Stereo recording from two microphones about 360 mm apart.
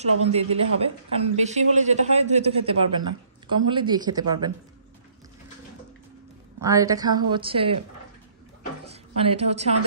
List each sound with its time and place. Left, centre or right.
0.0 s a woman's voice: centre
6.6 s a woman's voice: centre
8.8 s a sound: centre